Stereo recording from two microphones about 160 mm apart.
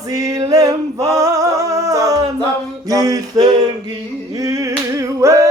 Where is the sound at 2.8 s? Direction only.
20° right (ahead or behind).